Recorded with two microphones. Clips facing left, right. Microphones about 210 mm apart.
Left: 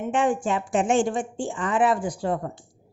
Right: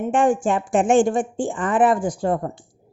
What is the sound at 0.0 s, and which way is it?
Speech, 45° right (ahead or behind).